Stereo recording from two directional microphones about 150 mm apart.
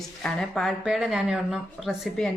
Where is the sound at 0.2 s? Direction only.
5° left (ahead or behind).